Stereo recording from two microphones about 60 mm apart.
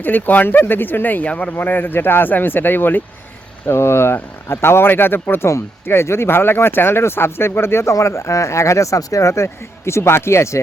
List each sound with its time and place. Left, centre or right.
0.0 s speech: left
1.5 s speech: left
3.7 s speech: left
5.5 s speech: left